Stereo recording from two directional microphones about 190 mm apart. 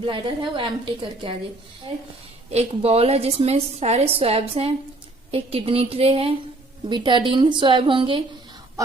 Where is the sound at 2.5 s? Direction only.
35° right (ahead or behind).